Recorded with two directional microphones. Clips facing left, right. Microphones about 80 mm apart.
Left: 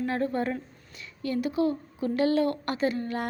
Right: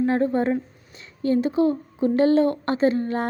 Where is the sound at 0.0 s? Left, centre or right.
Right.